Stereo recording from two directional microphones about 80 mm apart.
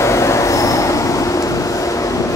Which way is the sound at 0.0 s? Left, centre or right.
Left.